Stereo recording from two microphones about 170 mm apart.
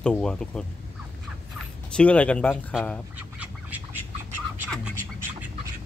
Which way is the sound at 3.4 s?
10° right (ahead or behind).